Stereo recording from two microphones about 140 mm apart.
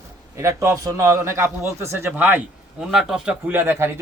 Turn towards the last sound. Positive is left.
turn(degrees=-15)  # may be behind; listen again after turning